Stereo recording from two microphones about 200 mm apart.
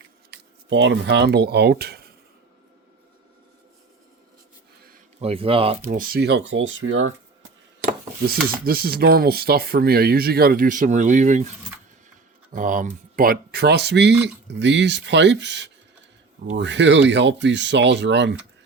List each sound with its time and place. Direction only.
0.3 s speech: 60° right (ahead or behind)
5.2 s speech: 30° right (ahead or behind)
5.9 s speech: 45° right (ahead or behind)
6.5 s speech: 70° right (ahead or behind)
8.3 s speech: 50° right (ahead or behind)
12.5 s speech: 40° right (ahead or behind); by 18.3 s 60° right (ahead or behind)